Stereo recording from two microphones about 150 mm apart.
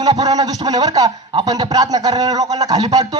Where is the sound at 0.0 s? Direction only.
25° right (ahead or behind).